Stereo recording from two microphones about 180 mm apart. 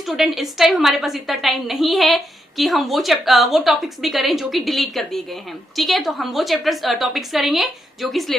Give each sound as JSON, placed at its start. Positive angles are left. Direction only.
{"t": 0.0, "sound": "a woman's voice", "side_deg": 0}